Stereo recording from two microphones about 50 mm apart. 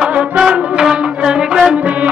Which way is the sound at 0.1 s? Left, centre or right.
Right.